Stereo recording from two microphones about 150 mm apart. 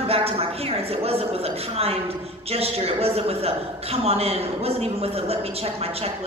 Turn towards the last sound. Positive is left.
turn(degrees=-40)  # may be behind; listen again after turning